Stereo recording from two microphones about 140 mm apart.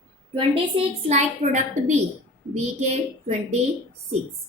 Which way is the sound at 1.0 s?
55° right (ahead or behind).